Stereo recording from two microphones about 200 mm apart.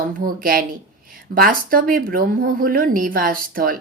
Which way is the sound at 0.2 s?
45° right (ahead or behind).